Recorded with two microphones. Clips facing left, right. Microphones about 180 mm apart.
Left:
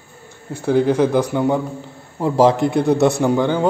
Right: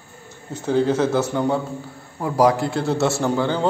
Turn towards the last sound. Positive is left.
turn(degrees=15)  # may be behind; listen again after turning